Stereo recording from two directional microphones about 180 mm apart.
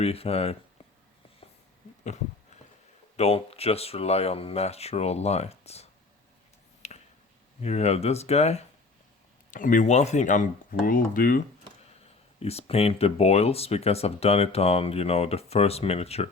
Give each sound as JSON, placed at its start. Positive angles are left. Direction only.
{"t": 0.0, "sound": "speech", "side_deg": 35}
{"t": 3.2, "sound": "speech", "side_deg": 35}
{"t": 6.8, "sound": "a sound", "side_deg": 40}
{"t": 7.6, "sound": "speech", "side_deg": 35}
{"t": 9.5, "sound": "speech", "side_deg": 45}
{"t": 12.4, "sound": "speech", "side_deg": 35}